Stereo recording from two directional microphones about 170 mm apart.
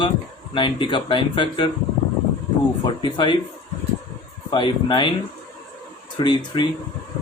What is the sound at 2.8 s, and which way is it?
Speech, 30° left (ahead or behind).